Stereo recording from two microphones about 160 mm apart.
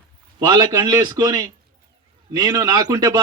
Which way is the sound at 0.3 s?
25° right (ahead or behind).